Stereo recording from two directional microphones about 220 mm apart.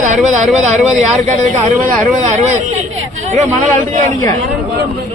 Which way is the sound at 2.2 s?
30° right (ahead or behind).